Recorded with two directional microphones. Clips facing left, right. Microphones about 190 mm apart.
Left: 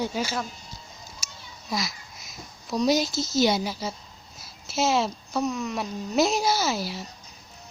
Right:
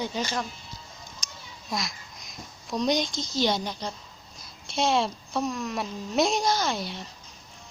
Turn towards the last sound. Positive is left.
turn(degrees=5)  # may be behind; listen again after turning